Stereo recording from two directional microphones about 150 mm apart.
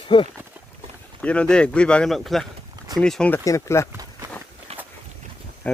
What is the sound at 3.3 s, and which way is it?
Speech, 20° left (ahead or behind).